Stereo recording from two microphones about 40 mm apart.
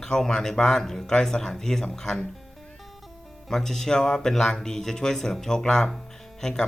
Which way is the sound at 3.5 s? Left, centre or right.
Centre.